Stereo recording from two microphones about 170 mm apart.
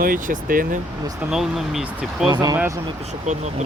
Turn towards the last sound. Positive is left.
turn(degrees=-45)  # may be behind; listen again after turning